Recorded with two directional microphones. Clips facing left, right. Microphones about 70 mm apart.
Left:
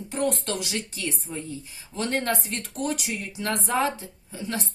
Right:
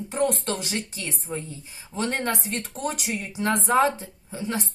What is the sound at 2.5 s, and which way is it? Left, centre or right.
Speech, right.